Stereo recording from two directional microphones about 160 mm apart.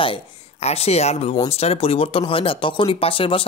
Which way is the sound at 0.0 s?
35° left (ahead or behind).